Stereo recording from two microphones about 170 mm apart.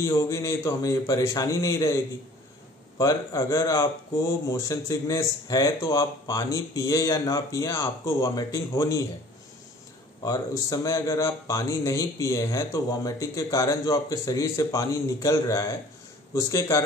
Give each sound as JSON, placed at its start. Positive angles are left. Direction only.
{"t": 0.0, "sound": "speech", "side_deg": 15}
{"t": 3.0, "sound": "speech", "side_deg": 20}
{"t": 10.2, "sound": "speech", "side_deg": 20}